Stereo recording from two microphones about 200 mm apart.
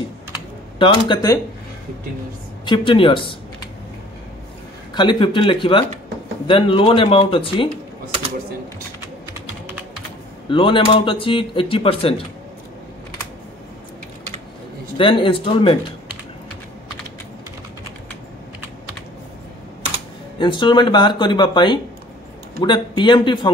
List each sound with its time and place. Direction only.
0.7 s speech: 25° left (ahead or behind)
2.6 s speech: 25° left (ahead or behind)
4.9 s speech: 25° left (ahead or behind)
10.5 s speech: 25° left (ahead or behind)
15.0 s speech: 25° left (ahead or behind)
20.3 s speech: 25° left (ahead or behind)